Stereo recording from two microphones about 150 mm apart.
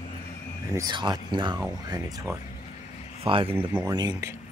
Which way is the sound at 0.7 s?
30° right (ahead or behind).